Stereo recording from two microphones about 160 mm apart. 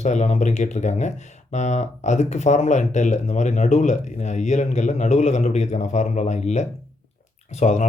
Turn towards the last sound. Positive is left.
turn(degrees=45)  # may be behind; listen again after turning